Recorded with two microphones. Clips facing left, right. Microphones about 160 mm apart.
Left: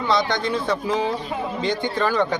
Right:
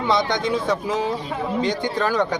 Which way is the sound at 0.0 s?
20° right (ahead or behind).